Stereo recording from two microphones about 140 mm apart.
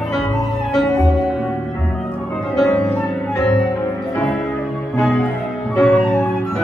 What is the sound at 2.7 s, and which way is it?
Music, 15° left (ahead or behind).